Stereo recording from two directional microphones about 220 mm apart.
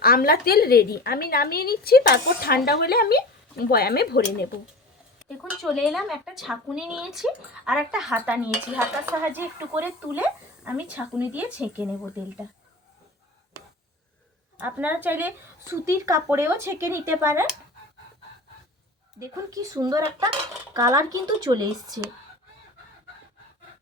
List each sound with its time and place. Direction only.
0.0 s a woman's voice: 40° left (ahead or behind)
5.4 s speech: centre (ahead or behind)
14.6 s speech: 5° right (ahead or behind)
19.2 s speech: 15° right (ahead or behind)